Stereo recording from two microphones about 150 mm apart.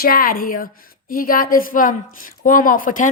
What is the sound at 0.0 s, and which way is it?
A woman's voice, 75° left (ahead or behind).